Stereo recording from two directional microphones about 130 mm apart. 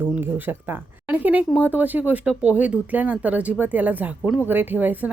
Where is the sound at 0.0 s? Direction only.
15° right (ahead or behind).